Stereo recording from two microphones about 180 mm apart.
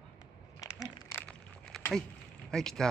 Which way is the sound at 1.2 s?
5° left (ahead or behind).